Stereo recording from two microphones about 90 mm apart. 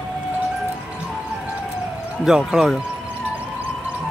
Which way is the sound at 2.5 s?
5° right (ahead or behind).